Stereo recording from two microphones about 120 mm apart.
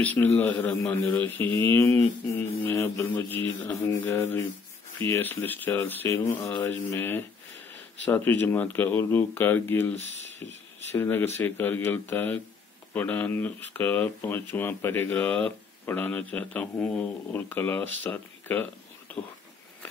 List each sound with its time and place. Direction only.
0.0 s a man's voice: 15° left (ahead or behind)